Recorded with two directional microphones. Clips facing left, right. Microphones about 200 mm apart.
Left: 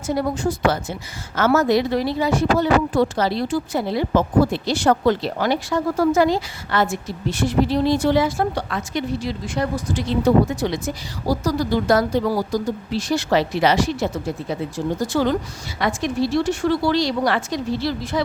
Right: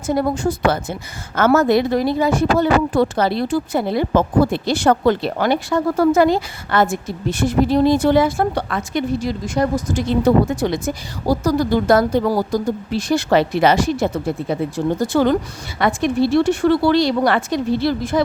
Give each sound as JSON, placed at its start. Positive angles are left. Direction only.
{"t": 0.1, "sound": "a woman's voice", "side_deg": -50}